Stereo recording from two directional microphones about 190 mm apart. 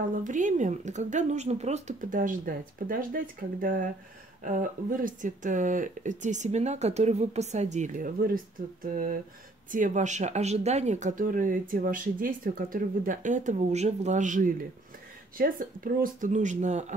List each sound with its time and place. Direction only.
0.1 s a woman's voice: 40° right (ahead or behind)